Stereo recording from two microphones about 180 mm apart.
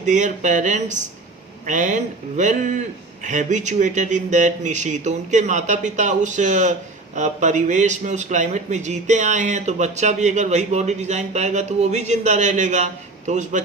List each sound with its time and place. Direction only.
0.0 s a man's voice: 45° right (ahead or behind)